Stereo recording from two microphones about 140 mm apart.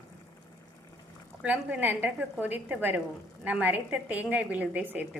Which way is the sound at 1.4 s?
10° right (ahead or behind).